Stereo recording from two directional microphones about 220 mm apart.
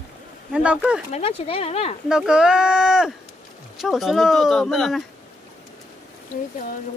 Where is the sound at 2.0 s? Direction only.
5° right (ahead or behind).